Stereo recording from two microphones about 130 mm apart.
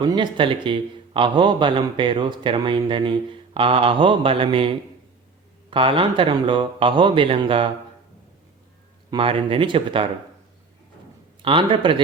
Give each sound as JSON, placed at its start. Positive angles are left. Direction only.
{"t": 0.0, "sound": "a man's voice", "side_deg": -35}
{"t": 9.0, "sound": "speech", "side_deg": -45}
{"t": 11.4, "sound": "a man's voice", "side_deg": -40}